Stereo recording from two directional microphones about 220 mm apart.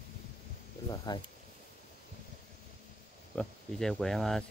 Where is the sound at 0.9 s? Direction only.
20° left (ahead or behind).